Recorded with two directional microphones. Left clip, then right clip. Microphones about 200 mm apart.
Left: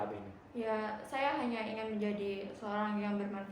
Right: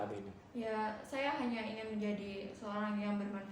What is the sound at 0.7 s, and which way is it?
Speech, 25° left (ahead or behind).